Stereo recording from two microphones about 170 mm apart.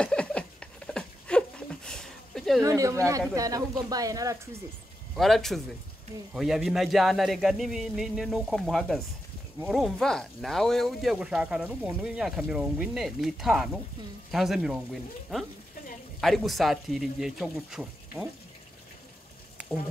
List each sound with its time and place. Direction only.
0.0 s a sound: 5° left (ahead or behind)
2.6 s speech: 20° right (ahead or behind)
5.1 s speech: centre (ahead or behind)